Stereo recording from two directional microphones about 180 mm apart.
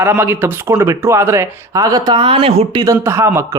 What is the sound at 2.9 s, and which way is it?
Speech, 15° right (ahead or behind).